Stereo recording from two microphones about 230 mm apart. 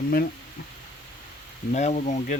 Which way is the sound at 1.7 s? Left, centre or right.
Left.